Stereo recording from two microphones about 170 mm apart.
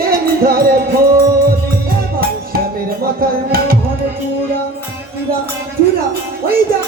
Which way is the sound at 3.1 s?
60° right (ahead or behind).